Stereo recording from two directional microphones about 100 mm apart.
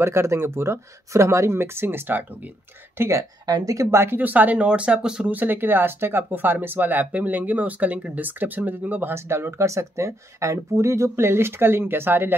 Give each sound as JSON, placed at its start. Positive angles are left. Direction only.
{"t": 0.0, "sound": "speech", "side_deg": -25}
{"t": 3.0, "sound": "speech", "side_deg": -30}